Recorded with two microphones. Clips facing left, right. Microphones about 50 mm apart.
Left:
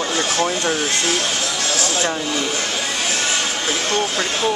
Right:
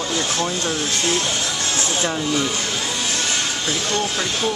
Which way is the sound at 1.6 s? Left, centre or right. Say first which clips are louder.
Left 2 dB; right.